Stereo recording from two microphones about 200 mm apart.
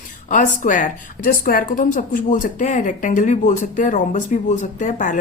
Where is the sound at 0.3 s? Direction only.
40° left (ahead or behind).